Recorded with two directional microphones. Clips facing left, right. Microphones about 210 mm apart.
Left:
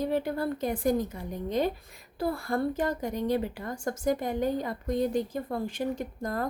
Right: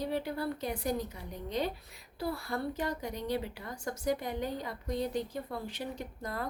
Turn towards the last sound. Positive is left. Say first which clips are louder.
# left 6 dB
turn(degrees=45)  # may be behind; listen again after turning